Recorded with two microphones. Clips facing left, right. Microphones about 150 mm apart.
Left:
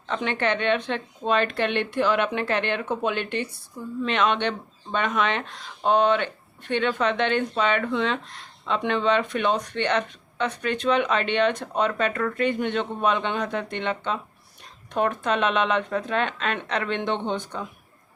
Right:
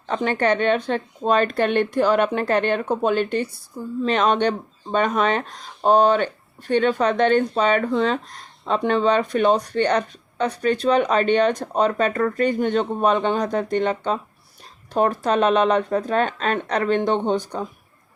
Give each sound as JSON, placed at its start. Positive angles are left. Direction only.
{"t": 0.1, "sound": "speech", "side_deg": -40}